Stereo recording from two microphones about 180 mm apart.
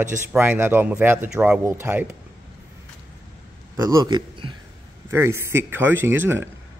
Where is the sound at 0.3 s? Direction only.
10° right (ahead or behind).